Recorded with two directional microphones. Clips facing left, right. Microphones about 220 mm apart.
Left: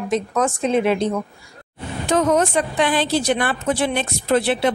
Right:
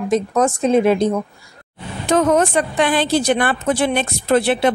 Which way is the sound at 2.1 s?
55° right (ahead or behind).